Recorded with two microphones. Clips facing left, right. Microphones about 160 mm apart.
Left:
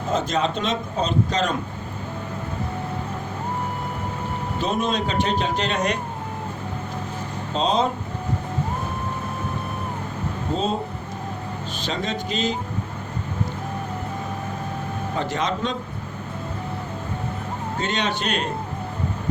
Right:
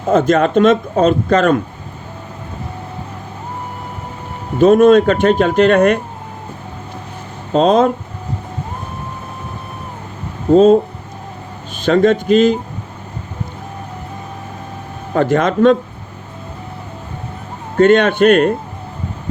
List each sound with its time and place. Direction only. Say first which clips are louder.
0.1 s speech: right 11 dB; 55° right (ahead or behind)
4.6 s speech: right 17 dB; 55° right (ahead or behind)
7.5 s speech: right 10 dB; 55° right (ahead or behind)
10.5 s speech: right 17 dB; 55° right (ahead or behind)
11.8 s speech: right 16 dB; 55° right (ahead or behind)
15.1 s speech: right 12 dB; 55° right (ahead or behind)
17.7 s speech: right 17 dB; 55° right (ahead or behind)